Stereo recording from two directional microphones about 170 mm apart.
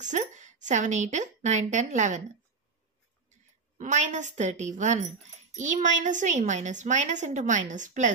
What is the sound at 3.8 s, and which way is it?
Speech, 45° right (ahead or behind).